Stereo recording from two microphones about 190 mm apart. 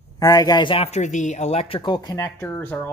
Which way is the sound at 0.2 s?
20° left (ahead or behind).